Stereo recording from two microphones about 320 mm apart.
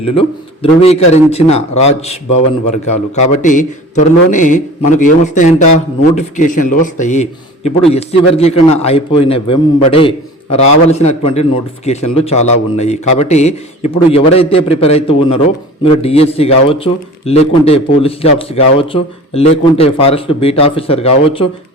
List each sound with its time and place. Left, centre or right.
0.0 s a man's voice: centre
3.4 s a man's voice: left